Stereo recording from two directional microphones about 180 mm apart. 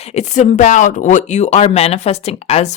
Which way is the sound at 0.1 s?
40° left (ahead or behind).